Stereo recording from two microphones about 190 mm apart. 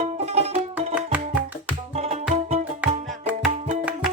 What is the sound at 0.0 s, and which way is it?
Music, 35° right (ahead or behind).